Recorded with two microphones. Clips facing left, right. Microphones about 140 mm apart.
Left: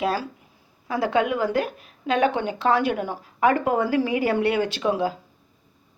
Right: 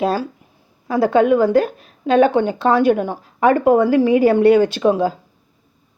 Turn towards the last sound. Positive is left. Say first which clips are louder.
# right 7 dB
turn(degrees=-30)  # may be behind; listen again after turning